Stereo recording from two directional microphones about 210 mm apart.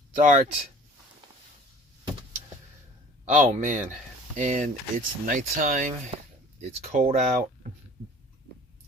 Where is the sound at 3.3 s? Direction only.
35° right (ahead or behind).